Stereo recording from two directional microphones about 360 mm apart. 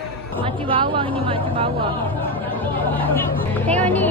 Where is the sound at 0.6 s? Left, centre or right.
Centre.